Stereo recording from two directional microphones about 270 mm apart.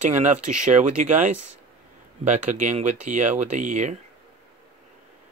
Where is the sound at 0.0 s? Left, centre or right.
Right.